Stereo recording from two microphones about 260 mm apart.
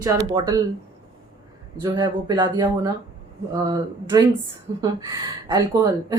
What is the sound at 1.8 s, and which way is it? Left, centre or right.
Speech, centre.